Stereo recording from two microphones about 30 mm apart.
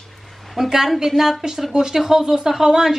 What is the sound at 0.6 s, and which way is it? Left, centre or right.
A woman's voice, centre.